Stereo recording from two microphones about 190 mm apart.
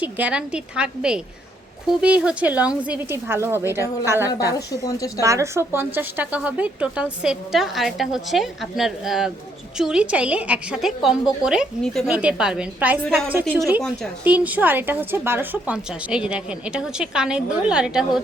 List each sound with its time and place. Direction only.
0.0 s a woman's voice: 10° right (ahead or behind)
4.5 s speech: 20° left (ahead or behind)
5.2 s a woman's voice: 15° right (ahead or behind)